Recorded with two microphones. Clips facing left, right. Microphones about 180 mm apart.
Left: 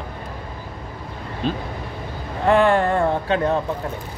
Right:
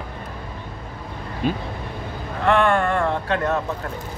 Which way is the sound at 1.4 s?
10° right (ahead or behind).